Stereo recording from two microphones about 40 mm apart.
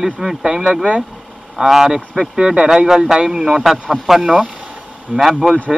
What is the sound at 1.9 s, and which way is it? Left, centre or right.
A man's voice, right.